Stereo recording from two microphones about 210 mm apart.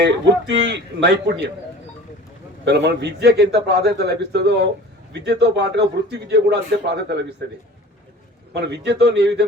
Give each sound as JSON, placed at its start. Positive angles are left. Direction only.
{"t": 0.0, "sound": "speech", "side_deg": -55}
{"t": 2.6, "sound": "a man's voice", "side_deg": -55}
{"t": 8.5, "sound": "a man's voice", "side_deg": -55}